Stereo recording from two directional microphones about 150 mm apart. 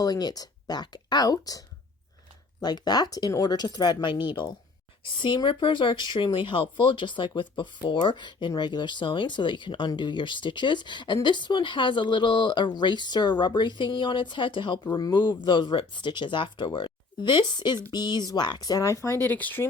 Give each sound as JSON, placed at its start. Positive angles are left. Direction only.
{"t": 0.0, "sound": "speech", "side_deg": 25}